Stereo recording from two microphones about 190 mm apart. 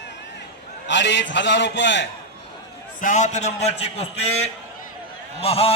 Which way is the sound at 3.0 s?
40° left (ahead or behind).